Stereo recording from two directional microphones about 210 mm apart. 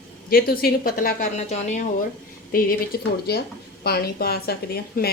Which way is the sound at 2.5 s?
45° left (ahead or behind).